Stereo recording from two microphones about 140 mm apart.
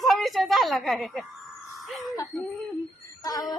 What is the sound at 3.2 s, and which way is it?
Speech, 25° left (ahead or behind).